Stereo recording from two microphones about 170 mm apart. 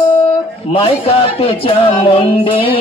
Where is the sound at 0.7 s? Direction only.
35° left (ahead or behind).